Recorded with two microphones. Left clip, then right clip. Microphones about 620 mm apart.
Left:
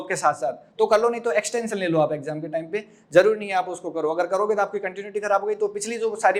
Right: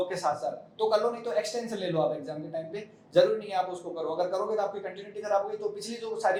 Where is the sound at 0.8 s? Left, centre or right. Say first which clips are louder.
Left 7 dB; left.